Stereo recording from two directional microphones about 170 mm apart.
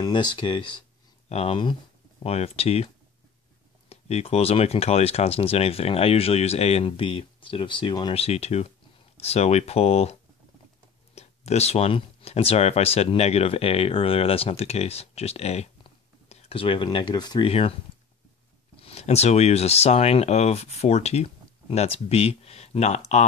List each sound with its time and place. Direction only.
0.0 s speech: 25° left (ahead or behind)
3.9 s speech: 35° left (ahead or behind)
8.1 s speech: 35° left (ahead or behind)
11.1 s speech: 40° left (ahead or behind)
18.8 s speech: 35° left (ahead or behind)